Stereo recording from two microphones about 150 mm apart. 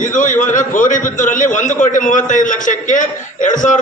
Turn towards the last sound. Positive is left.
turn(degrees=60)  # may be behind; listen again after turning